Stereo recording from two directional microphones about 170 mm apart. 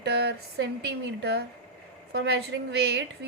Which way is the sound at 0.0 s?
75° right (ahead or behind).